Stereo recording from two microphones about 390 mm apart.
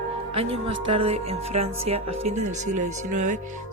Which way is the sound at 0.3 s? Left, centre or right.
Centre.